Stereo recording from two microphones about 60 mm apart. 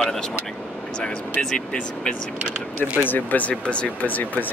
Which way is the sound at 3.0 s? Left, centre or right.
Left.